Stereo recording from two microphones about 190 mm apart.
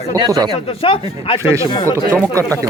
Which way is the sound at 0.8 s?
30° left (ahead or behind).